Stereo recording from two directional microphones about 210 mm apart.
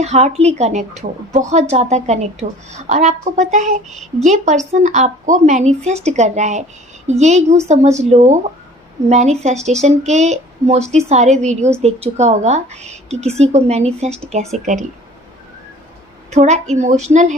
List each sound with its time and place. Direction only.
0.0 s speech: 30° right (ahead or behind)
16.3 s speech: 30° right (ahead or behind)